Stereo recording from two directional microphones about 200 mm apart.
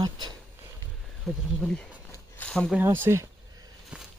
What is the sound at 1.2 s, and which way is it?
Speech, 5° left (ahead or behind).